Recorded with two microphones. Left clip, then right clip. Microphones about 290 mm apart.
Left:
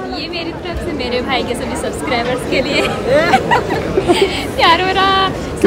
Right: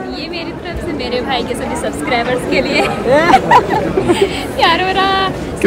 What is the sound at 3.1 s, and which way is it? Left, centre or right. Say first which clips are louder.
Speech: right 3 dB; right.